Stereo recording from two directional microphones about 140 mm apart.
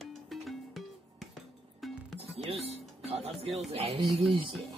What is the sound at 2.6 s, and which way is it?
Music, 50° right (ahead or behind).